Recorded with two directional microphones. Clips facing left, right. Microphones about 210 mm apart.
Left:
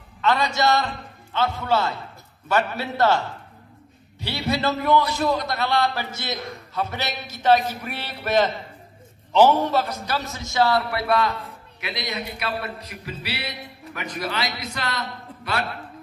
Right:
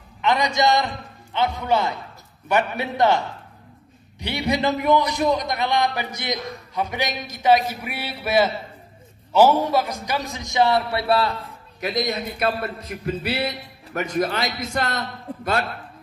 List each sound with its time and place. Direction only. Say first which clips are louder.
0.2 s a man's voice: right 1 dB; 15° right (ahead or behind)
11.9 s a man's voice: right 5 dB; 45° right (ahead or behind)